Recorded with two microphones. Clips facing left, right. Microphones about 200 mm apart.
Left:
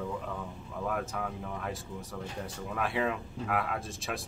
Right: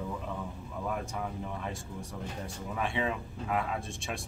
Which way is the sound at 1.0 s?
Centre (ahead or behind).